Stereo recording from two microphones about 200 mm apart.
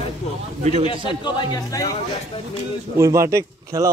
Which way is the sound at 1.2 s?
20° left (ahead or behind).